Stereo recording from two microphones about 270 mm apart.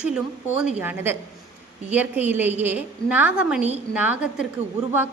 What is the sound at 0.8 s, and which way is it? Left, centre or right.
A woman's voice, centre.